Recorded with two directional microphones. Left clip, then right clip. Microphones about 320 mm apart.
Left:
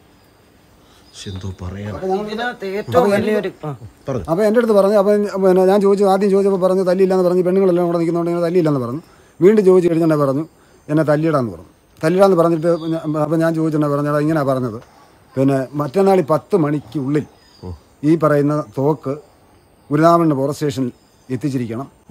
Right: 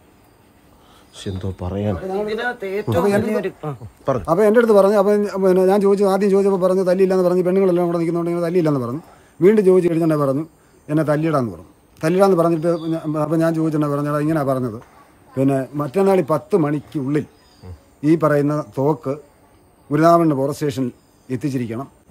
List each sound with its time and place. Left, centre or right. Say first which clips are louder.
1.1 s speech: right 3 dB; centre
2.6 s speech: left 2 dB; left
3.1 s speech: left 2 dB; centre